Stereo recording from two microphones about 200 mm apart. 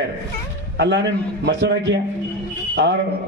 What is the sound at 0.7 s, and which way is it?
A man's voice, 60° right (ahead or behind).